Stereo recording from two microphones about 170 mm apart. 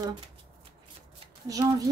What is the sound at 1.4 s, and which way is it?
Speech, 20° right (ahead or behind).